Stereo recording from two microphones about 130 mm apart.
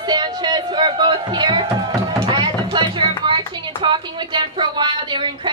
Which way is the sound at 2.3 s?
40° right (ahead or behind).